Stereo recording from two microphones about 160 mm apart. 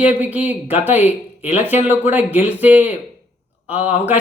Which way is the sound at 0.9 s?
45° left (ahead or behind).